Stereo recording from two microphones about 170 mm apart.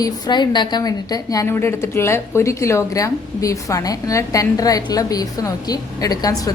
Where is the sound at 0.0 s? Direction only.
25° left (ahead or behind).